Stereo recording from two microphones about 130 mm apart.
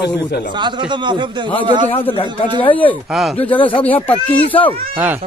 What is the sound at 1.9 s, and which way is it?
Speech, 45° left (ahead or behind).